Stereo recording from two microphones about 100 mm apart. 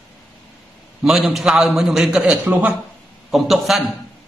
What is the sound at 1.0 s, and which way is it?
A man's voice, centre (ahead or behind).